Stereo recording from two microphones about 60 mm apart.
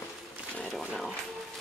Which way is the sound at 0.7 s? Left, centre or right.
Centre.